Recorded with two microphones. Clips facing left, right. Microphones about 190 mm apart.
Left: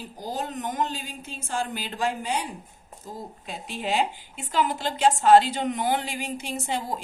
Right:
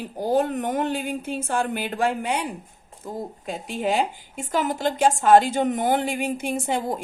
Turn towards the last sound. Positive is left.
turn(degrees=-55)  # may be behind; listen again after turning